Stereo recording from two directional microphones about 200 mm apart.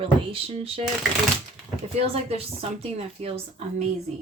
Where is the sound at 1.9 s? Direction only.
30° right (ahead or behind).